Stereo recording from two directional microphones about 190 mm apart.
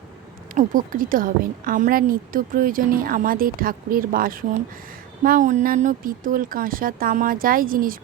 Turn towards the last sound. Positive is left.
turn(degrees=-50)  # may be behind; listen again after turning